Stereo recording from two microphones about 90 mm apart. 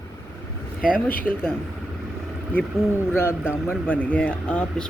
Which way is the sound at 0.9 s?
20° left (ahead or behind).